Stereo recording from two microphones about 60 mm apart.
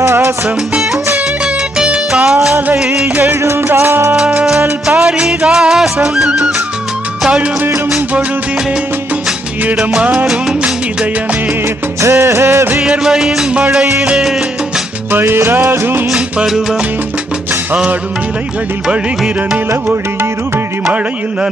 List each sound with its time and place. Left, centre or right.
0.0 s music: right
1.4 s music: centre
3.2 s music: right
4.4 s salsa music: centre
4.9 s music: centre
12.0 s music: right
13.0 s music: centre
15.0 s music: right
18.9 s music: centre
19.9 s music: right
20.8 s music: centre